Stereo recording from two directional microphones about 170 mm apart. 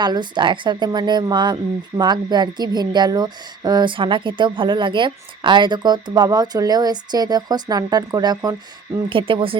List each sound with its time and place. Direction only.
0.0 s a woman's voice: 25° right (ahead or behind)